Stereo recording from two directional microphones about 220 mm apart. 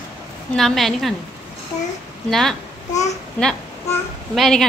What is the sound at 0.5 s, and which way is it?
Speech, centre (ahead or behind).